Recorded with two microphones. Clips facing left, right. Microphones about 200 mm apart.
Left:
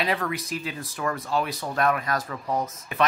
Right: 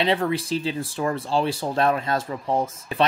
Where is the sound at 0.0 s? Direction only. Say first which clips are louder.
Right 5 dB; 25° right (ahead or behind).